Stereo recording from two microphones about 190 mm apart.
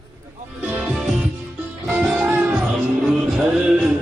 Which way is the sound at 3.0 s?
5° right (ahead or behind).